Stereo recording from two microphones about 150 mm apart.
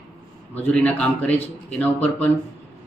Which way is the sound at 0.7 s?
10° left (ahead or behind).